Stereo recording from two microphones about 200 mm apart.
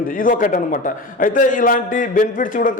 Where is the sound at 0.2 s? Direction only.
45° left (ahead or behind).